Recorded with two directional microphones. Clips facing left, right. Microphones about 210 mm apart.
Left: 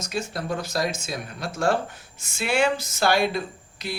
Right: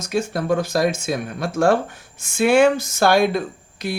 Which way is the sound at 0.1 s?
50° right (ahead or behind).